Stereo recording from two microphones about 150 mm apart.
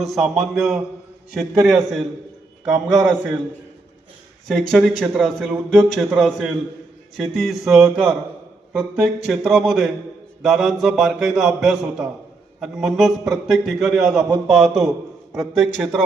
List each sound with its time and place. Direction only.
0.0 s a man's voice: centre (ahead or behind)
4.4 s a man's voice: centre (ahead or behind)